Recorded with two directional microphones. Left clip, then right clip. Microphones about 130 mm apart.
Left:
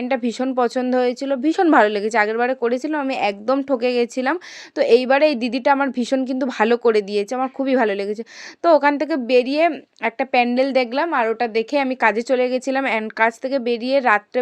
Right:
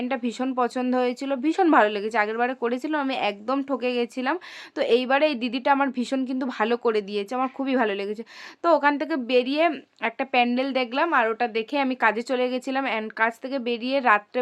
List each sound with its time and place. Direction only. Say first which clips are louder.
0.1 s a woman's voice: left 6 dB; 30° left (ahead or behind)
7.3 s a woman's voice: left 4 dB; 25° left (ahead or behind)